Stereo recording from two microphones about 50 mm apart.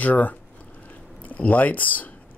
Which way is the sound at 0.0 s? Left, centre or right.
Left.